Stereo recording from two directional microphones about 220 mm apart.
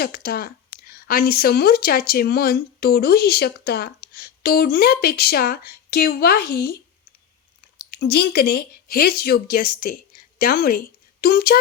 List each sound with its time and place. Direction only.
0.0 s speech: 45° left (ahead or behind)
7.8 s speech: 45° left (ahead or behind)